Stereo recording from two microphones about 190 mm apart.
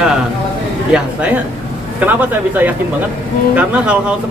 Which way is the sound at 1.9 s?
10° right (ahead or behind).